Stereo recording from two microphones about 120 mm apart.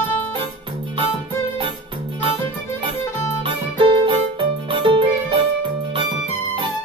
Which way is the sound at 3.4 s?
45° right (ahead or behind).